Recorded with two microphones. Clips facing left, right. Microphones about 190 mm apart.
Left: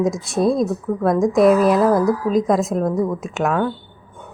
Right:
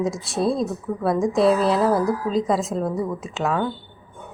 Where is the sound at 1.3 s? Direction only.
15° left (ahead or behind).